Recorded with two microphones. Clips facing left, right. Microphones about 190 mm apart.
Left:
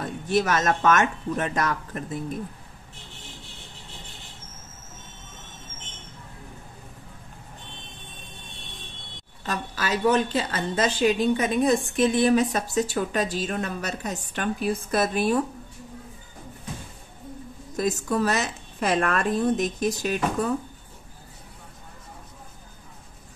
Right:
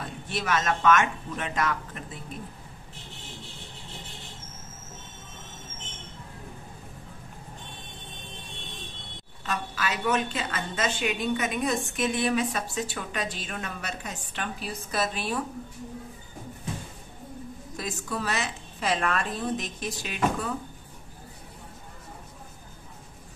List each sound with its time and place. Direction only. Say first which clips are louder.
0.0 s a woman's voice: left 9 dB; 45° left (ahead or behind)
9.4 s a woman's voice: left 1 dB; 40° left (ahead or behind)
17.7 s a woman's voice: left 9 dB; 45° left (ahead or behind)